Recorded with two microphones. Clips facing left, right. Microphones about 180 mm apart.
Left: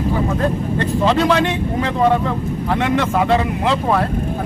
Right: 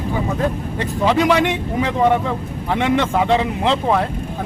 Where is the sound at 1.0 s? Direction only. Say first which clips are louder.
Right 1 dB; 15° right (ahead or behind).